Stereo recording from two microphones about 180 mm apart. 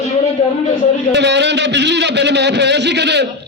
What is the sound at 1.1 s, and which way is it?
A man's voice, 75° right (ahead or behind).